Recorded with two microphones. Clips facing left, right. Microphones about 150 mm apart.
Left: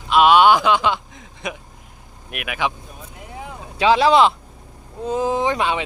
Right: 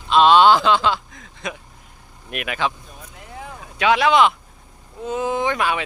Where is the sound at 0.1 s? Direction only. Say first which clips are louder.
Even; 10° left (ahead or behind).